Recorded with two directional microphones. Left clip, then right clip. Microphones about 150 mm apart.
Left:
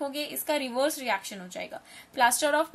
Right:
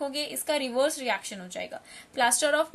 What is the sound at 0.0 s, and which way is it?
A woman's voice, 10° right (ahead or behind).